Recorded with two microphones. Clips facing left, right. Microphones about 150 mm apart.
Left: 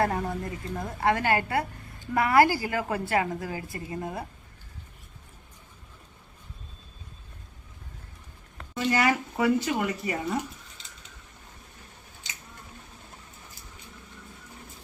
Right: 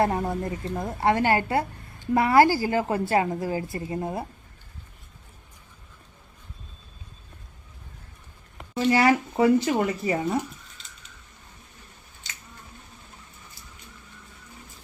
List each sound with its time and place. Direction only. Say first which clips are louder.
0.0 s a woman's voice: right 3 dB; 25° right (ahead or behind)
8.5 s speech: right 4 dB; 25° right (ahead or behind)